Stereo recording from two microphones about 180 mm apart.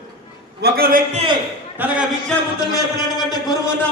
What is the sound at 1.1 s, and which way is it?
Speech, 35° right (ahead or behind).